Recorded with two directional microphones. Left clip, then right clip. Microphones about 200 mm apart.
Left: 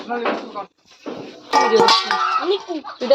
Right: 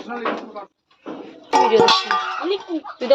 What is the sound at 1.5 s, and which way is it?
Music, 20° right (ahead or behind).